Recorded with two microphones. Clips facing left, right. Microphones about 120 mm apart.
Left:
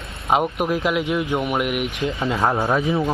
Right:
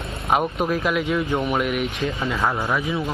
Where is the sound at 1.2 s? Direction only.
5° left (ahead or behind); by 3.1 s 25° left (ahead or behind).